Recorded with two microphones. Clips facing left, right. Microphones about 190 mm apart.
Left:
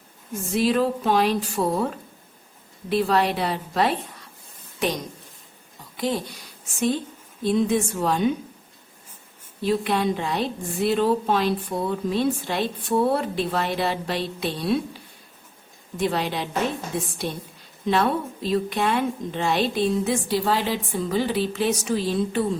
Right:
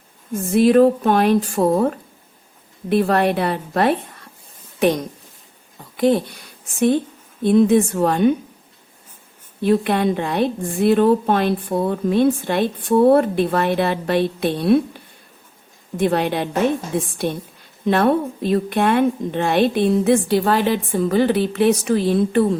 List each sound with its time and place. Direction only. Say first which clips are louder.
0.5 s a woman's voice: right 9 dB; 55° right (ahead or behind)
6.7 s a woman's voice: right 7 dB; 60° right (ahead or behind)
9.6 s a woman's voice: right 5 dB; 55° right (ahead or behind)
16.0 s a woman's voice: right 6 dB; 55° right (ahead or behind)